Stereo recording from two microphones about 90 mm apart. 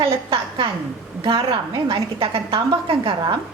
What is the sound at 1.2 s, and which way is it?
A woman's voice, 65° right (ahead or behind).